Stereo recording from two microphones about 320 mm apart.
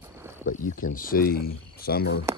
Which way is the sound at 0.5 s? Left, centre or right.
Left.